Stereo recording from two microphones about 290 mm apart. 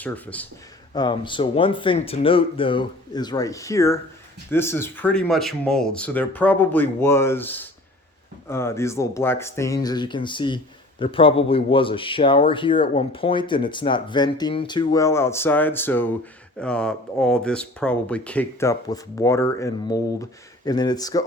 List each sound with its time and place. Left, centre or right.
0.0 s speech: centre
0.9 s speech: centre